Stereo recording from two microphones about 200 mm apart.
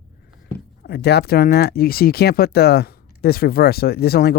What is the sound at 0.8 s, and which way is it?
Speech, 55° left (ahead or behind).